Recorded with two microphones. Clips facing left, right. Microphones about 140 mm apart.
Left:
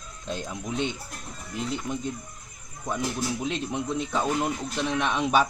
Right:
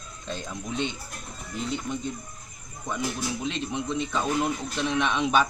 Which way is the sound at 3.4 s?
10° left (ahead or behind).